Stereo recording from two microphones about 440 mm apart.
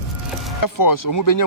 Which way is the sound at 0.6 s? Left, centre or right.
Left.